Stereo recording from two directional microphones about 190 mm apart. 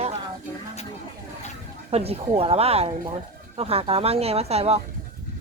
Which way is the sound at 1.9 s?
35° right (ahead or behind).